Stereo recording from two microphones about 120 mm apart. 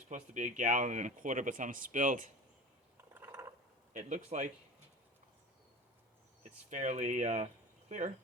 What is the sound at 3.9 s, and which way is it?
Speech, 90° right.